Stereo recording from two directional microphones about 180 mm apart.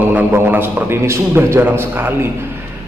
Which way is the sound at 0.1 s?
10° right (ahead or behind).